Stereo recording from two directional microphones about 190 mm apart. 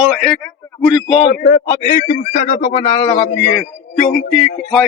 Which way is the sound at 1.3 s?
50° left (ahead or behind).